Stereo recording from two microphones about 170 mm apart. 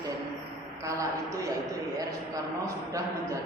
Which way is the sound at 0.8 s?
20° right (ahead or behind).